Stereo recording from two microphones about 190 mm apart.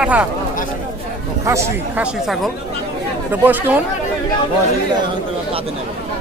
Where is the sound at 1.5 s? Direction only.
15° right (ahead or behind).